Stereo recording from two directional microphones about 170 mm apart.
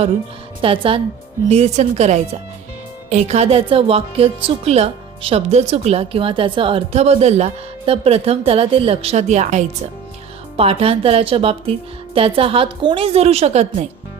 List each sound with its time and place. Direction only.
0.6 s speech: 30° right (ahead or behind)